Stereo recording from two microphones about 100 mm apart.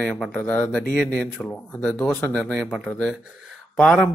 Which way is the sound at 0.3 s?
15° left (ahead or behind).